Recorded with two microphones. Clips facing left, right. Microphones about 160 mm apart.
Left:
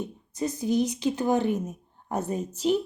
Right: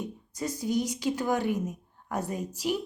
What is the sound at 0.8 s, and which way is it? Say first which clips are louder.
A woman's voice: left 2 dB; 20° left (ahead or behind).